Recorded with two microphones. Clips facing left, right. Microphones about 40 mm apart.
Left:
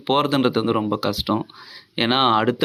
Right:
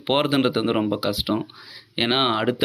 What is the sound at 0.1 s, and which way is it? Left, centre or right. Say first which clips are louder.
Speech: left 2 dB; centre.